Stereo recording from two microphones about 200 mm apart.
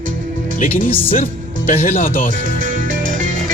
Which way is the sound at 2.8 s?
70° right (ahead or behind).